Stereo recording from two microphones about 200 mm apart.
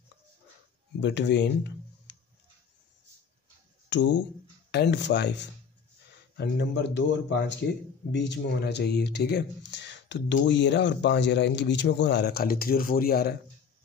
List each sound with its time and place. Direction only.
1.0 s speech: 60° left (ahead or behind)
3.9 s speech: 60° left (ahead or behind)